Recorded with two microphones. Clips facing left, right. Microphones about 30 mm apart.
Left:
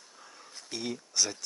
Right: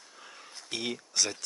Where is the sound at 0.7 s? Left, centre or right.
Right.